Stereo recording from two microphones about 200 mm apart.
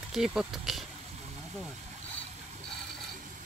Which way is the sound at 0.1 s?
5° right (ahead or behind).